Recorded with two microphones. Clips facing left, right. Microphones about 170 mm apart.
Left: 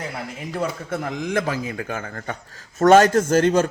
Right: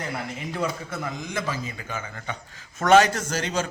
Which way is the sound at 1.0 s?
55° left (ahead or behind).